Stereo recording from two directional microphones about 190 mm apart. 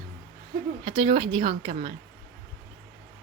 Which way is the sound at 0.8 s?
25° right (ahead or behind).